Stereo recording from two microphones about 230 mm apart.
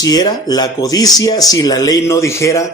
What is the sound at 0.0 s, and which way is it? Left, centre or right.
Speech, centre.